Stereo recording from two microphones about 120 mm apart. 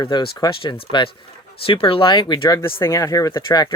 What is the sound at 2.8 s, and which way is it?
Speech, 25° left (ahead or behind).